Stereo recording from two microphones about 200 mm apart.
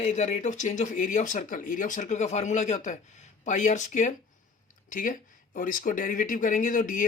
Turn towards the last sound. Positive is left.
turn(degrees=45)  # may be behind; listen again after turning